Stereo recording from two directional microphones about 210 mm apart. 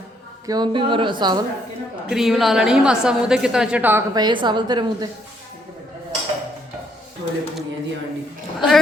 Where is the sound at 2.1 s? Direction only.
Centre (ahead or behind); by 5.0 s 20° right (ahead or behind).